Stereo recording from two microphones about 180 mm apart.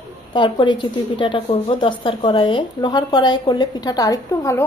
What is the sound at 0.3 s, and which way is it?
A woman's voice, 25° left (ahead or behind).